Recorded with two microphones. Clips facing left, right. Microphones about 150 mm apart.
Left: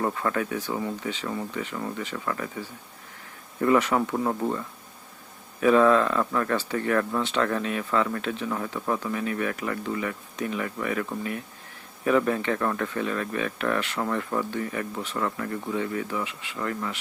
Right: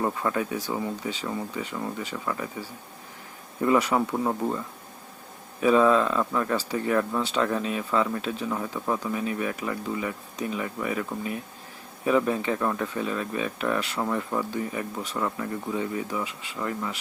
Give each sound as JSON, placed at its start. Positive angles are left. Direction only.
{"t": 0.0, "sound": "speech", "side_deg": -15}
{"t": 3.6, "sound": "speech", "side_deg": -15}
{"t": 7.6, "sound": "speech", "side_deg": -25}